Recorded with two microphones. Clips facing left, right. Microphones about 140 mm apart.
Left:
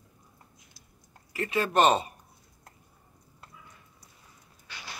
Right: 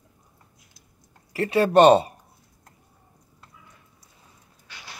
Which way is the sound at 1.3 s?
35° right (ahead or behind).